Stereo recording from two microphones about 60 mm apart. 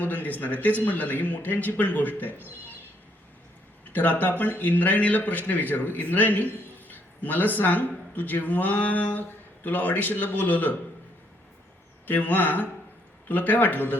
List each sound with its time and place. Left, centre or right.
0.0 s speech: left
3.9 s speech: left
12.0 s speech: left